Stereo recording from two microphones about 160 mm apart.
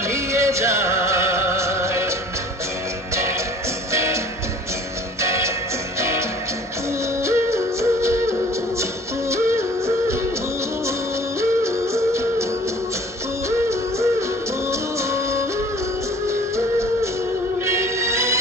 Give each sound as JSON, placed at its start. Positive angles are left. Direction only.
{"t": 0.1, "sound": "music", "side_deg": -15}
{"t": 3.9, "sound": "music", "side_deg": -15}
{"t": 5.2, "sound": "music", "side_deg": -15}
{"t": 11.3, "sound": "music", "side_deg": -15}
{"t": 13.5, "sound": "music", "side_deg": -15}
{"t": 17.7, "sound": "music", "side_deg": -15}